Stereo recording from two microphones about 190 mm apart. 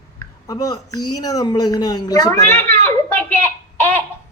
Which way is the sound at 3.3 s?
10° left (ahead or behind).